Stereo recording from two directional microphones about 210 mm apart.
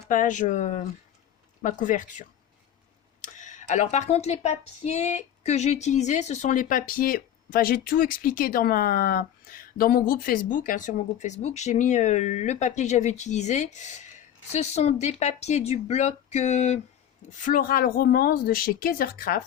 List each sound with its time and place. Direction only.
0.1 s a woman's voice: 35° left (ahead or behind)